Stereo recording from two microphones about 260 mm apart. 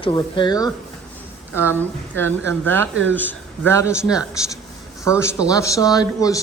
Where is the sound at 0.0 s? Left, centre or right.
Centre.